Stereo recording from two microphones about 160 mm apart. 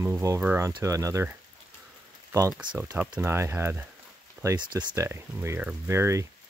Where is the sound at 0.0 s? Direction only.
20° right (ahead or behind).